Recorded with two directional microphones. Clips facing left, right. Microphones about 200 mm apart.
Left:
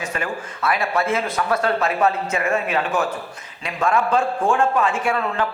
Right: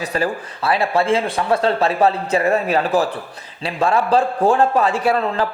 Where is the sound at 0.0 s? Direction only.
35° right (ahead or behind).